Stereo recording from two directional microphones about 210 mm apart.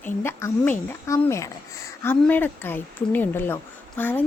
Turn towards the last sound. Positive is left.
turn(degrees=10)  # may be behind; listen again after turning